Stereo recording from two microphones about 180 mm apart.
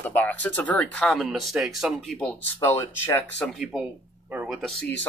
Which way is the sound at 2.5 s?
15° left (ahead or behind).